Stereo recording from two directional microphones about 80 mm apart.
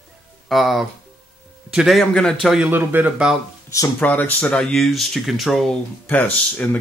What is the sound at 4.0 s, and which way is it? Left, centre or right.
Speech, left.